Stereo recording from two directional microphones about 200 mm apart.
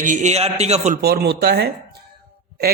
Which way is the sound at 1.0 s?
55° right (ahead or behind).